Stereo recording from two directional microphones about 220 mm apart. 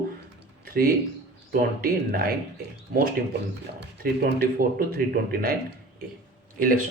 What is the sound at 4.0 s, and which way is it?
Speech, 45° right (ahead or behind).